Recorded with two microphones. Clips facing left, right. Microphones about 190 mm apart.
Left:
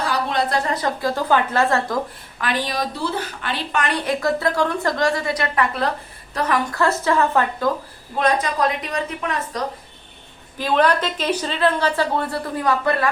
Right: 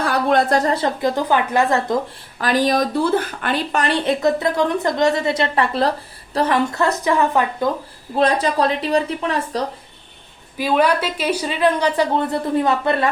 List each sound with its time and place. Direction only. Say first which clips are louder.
0.0 s a sound: right 5 dB; 55° right (ahead or behind)
0.7 s speech: right 3 dB; 25° right (ahead or behind)
2.4 s speech: right 6 dB; 40° right (ahead or behind); by 7.7 s 15° right (ahead or behind)
8.2 s speech: right 3 dB; 30° right (ahead or behind)
10.6 s speech: right 1 dB; 10° right (ahead or behind)